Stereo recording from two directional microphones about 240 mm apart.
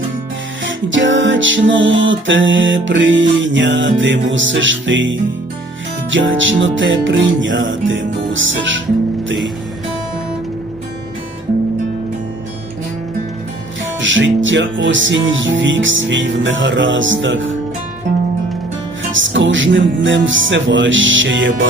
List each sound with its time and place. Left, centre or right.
0.6 s music: right
14.0 s music: right
19.1 s music: right